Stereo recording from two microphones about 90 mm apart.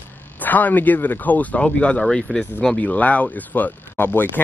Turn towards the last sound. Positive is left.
turn(degrees=20)  # may be behind; listen again after turning